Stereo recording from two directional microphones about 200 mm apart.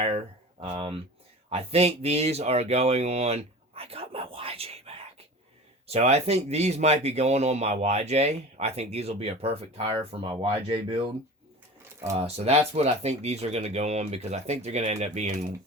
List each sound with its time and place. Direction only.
0.6 s speech: 25° right (ahead or behind)
12.1 s speech: 30° right (ahead or behind)